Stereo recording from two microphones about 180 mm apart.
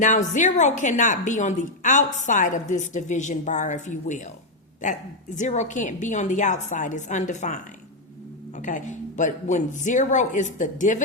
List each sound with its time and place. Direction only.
0.0 s speech: 45° left (ahead or behind)